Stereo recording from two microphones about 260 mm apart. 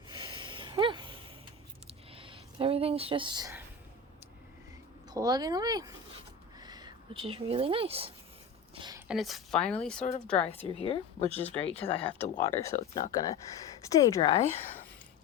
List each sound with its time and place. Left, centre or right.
0.1 s a sound: centre
5.1 s speech: centre
8.7 s a sound: centre
9.0 s a woman's voice: centre
10.0 s speech: left
11.2 s speech: right
11.6 s speech: left
12.0 s speech: centre